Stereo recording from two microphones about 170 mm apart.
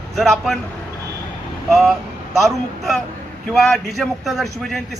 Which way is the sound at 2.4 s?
Centre (ahead or behind).